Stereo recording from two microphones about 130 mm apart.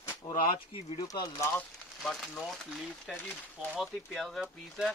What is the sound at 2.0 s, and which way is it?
A man's voice, 5° left (ahead or behind).